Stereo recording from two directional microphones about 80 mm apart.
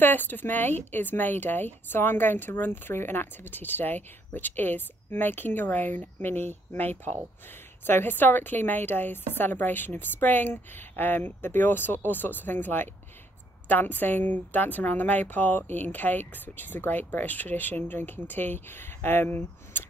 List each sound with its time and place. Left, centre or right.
0.0 s a woman's voice: left